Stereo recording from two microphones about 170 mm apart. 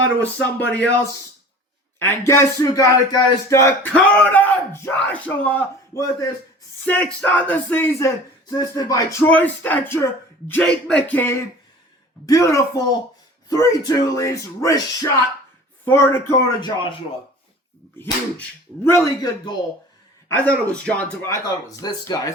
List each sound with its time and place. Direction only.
0.2 s speech: 10° left (ahead or behind)
3.9 s speech: 5° left (ahead or behind)
6.8 s speech: 5° left (ahead or behind)
16.6 s speech: 25° left (ahead or behind)
18.0 s speech: 10° left (ahead or behind)
20.3 s speech: 10° left (ahead or behind)
21.8 s speech: 20° left (ahead or behind)